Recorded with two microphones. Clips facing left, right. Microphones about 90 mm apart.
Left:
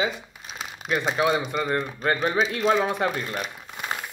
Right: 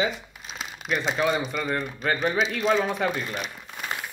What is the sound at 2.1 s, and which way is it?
Speech, 40° left (ahead or behind).